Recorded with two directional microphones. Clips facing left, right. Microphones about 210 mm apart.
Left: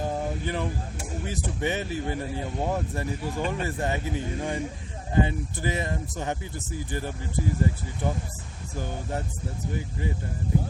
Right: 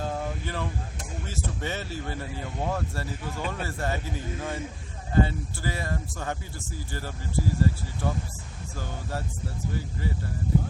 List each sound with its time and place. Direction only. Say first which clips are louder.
0.0 s speech: left 3 dB; 15° left (ahead or behind)